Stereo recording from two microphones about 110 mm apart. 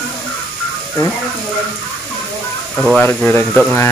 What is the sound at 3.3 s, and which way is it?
Speech, 15° left (ahead or behind).